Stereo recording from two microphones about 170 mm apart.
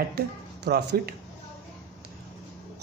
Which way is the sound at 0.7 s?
70° right (ahead or behind).